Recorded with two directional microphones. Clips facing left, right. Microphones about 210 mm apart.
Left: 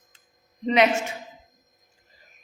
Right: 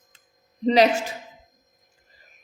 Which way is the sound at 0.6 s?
35° right (ahead or behind).